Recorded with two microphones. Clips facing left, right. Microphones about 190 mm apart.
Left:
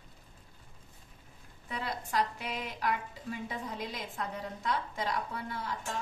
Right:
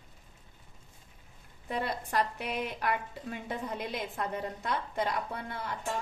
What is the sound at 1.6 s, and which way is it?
A woman's voice, 55° right (ahead or behind).